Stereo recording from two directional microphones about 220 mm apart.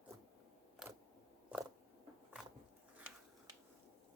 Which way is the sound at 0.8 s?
Centre (ahead or behind).